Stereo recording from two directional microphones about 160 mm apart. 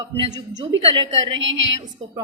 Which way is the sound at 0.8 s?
35° right (ahead or behind).